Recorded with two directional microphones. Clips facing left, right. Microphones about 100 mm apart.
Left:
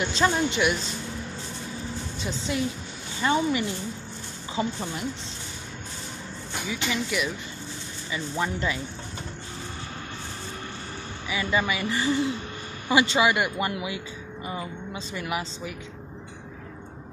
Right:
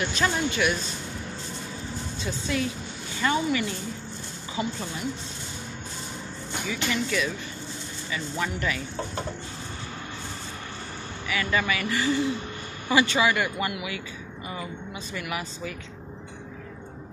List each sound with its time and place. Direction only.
0.0 s a woman's voice: 20° left (ahead or behind)
2.5 s a woman's voice: 20° left (ahead or behind)
6.7 s speech: 10° left (ahead or behind)
8.1 s a woman's voice: 25° left (ahead or behind)
11.2 s a woman's voice: 20° left (ahead or behind)
15.1 s a woman's voice: 20° left (ahead or behind)